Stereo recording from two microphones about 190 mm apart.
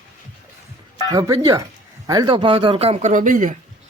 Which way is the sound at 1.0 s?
20° right (ahead or behind).